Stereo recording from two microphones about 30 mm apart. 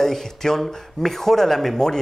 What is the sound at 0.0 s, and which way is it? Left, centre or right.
Speech, centre.